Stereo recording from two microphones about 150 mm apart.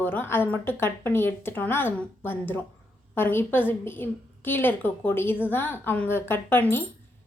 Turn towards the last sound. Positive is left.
turn(degrees=15)  # may be behind; listen again after turning